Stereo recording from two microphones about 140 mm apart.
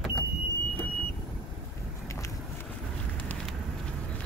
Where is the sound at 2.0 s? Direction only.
20° left (ahead or behind).